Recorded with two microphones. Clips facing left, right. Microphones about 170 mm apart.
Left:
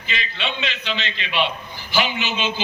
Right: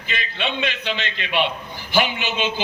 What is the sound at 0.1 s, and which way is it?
A man's voice, 55° right (ahead or behind).